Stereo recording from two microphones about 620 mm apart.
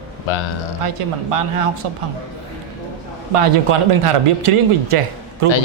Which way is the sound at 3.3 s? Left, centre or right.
Right.